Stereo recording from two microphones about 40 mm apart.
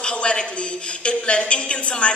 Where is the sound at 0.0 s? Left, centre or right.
Left.